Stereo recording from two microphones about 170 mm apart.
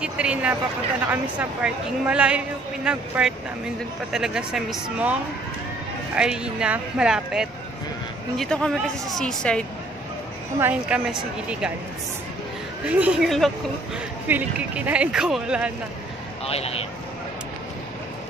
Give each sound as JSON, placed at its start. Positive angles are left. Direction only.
{"t": 0.0, "sound": "a woman's voice", "side_deg": -5}
{"t": 10.6, "sound": "a woman's voice", "side_deg": -5}
{"t": 12.8, "sound": "a woman's voice", "side_deg": -5}
{"t": 16.4, "sound": "speech", "side_deg": 35}